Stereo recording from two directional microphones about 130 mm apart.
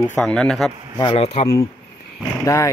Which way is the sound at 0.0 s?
10° left (ahead or behind).